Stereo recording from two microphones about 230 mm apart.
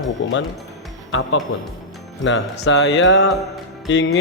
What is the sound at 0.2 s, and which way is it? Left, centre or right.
Speech, left.